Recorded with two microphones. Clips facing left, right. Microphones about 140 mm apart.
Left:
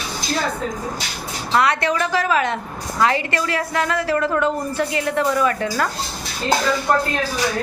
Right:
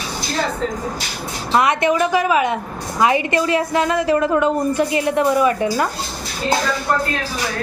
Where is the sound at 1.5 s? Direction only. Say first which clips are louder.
Right 3 dB; 20° right (ahead or behind).